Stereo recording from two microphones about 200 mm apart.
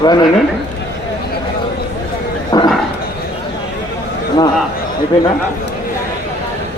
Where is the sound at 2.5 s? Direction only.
20° left (ahead or behind).